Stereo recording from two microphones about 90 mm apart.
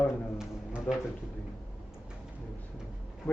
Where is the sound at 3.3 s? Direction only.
25° left (ahead or behind).